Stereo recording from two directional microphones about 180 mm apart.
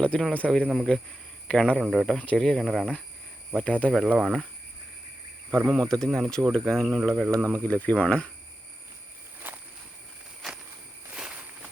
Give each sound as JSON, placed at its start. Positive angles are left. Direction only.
{"t": 0.0, "sound": "speech", "side_deg": 5}
{"t": 5.6, "sound": "speech", "side_deg": 0}
{"t": 7.3, "sound": "speech", "side_deg": -15}
{"t": 7.7, "sound": "speech", "side_deg": 10}
{"t": 9.4, "sound": "walk", "side_deg": -10}
{"t": 10.4, "sound": "a sound", "side_deg": 0}